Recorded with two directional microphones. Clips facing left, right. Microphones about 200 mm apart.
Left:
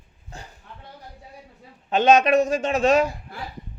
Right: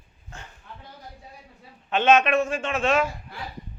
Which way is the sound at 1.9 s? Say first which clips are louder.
Left 3 dB; 40° left (ahead or behind).